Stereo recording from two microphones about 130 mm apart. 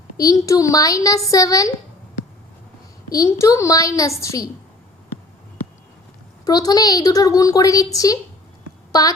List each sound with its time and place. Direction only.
0.2 s a woman's voice: 25° left (ahead or behind)
3.1 s a woman's voice: 25° left (ahead or behind)
6.4 s a woman's voice: 30° left (ahead or behind)